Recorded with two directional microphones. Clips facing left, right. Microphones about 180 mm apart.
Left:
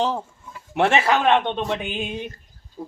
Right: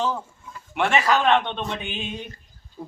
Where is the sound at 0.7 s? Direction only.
25° left (ahead or behind).